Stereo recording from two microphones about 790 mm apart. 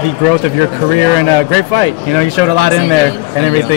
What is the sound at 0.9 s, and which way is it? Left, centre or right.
Speech, right.